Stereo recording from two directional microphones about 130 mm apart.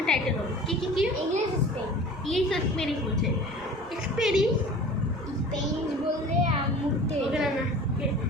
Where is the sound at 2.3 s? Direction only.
Centre (ahead or behind).